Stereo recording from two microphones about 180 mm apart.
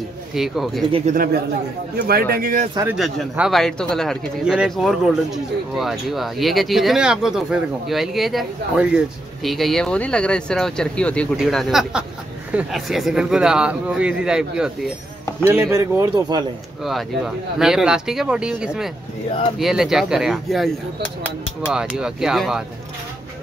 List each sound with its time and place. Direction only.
0.3 s speech: centre (ahead or behind)
1.1 s speech: 55° right (ahead or behind)
2.9 s speech: 5° right (ahead or behind)
15.4 s a man's voice: 15° right (ahead or behind)
16.8 s speech: centre (ahead or behind)